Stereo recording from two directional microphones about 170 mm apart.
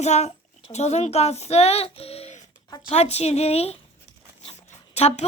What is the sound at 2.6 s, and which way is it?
Speech, 20° left (ahead or behind).